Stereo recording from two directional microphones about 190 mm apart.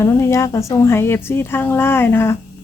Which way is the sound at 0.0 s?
15° left (ahead or behind).